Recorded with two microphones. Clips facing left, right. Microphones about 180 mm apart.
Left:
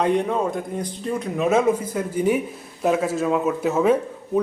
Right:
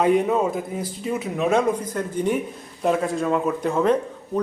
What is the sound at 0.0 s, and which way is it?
Speech, 5° right (ahead or behind).